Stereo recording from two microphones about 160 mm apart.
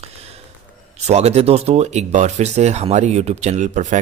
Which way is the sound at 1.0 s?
45° right (ahead or behind).